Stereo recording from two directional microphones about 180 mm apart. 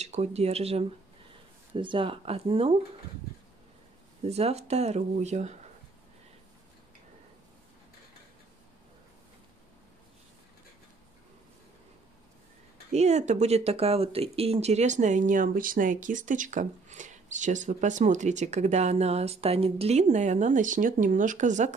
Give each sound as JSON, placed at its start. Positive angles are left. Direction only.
{"t": 0.0, "sound": "speech", "side_deg": -35}
{"t": 4.2, "sound": "speech", "side_deg": -35}
{"t": 12.9, "sound": "speech", "side_deg": -40}